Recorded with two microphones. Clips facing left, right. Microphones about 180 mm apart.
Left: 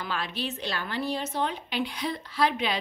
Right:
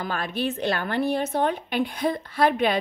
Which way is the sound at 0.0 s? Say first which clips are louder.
Right 5 dB; 50° right (ahead or behind).